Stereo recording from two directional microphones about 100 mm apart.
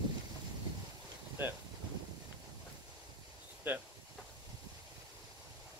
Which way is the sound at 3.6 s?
20° right (ahead or behind).